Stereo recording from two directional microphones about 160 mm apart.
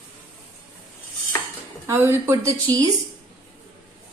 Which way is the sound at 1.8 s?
15° right (ahead or behind).